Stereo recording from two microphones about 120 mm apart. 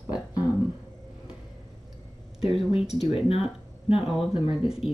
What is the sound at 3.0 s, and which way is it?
Speech, 50° left (ahead or behind).